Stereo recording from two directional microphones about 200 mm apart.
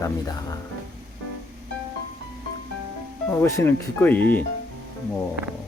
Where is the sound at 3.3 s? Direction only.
15° left (ahead or behind).